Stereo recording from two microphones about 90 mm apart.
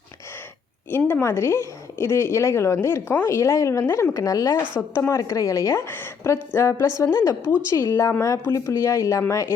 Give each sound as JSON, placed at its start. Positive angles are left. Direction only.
{"t": 0.9, "sound": "a woman's voice", "side_deg": 25}